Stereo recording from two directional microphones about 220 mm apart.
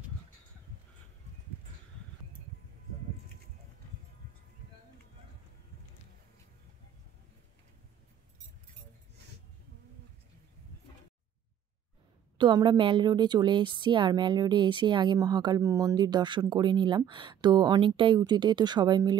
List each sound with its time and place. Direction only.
12.4 s a woman's voice: 20° right (ahead or behind)